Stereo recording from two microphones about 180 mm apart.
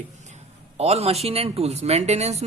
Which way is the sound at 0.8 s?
35° right (ahead or behind).